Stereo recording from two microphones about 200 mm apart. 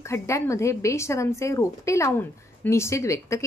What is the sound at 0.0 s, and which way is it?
A woman's voice, 15° left (ahead or behind).